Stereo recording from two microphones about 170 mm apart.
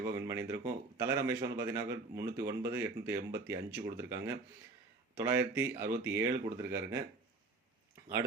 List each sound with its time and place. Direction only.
0.0 s speech: 15° right (ahead or behind)
3.7 s speech: 75° right (ahead or behind)
3.9 s speech: 15° right (ahead or behind)